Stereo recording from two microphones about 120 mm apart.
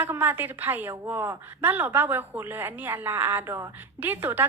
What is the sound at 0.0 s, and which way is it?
A woman's voice, 20° right (ahead or behind).